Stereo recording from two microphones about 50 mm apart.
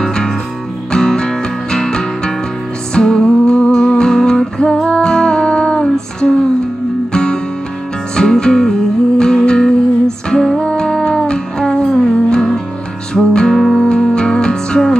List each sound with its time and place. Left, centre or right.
0.0 s music: centre